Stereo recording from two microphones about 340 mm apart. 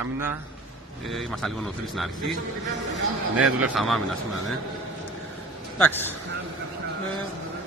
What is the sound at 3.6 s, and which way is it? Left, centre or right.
Speech, centre.